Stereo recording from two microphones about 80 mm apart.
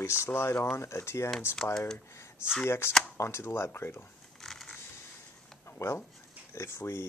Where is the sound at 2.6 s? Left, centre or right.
Left.